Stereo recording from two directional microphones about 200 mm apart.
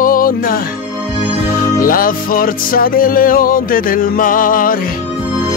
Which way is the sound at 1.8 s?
45° left (ahead or behind).